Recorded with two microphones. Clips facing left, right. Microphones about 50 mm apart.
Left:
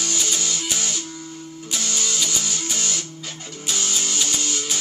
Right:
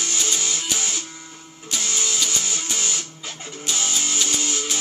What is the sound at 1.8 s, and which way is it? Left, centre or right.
Music, centre.